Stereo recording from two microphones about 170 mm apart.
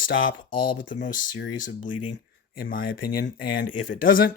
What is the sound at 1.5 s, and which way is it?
Speech, 50° left (ahead or behind).